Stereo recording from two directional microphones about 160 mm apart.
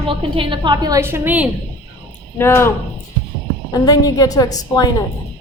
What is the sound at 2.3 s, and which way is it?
Speech, 15° left (ahead or behind).